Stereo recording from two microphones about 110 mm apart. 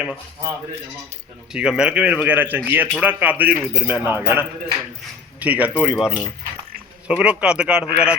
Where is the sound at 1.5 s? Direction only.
10° right (ahead or behind).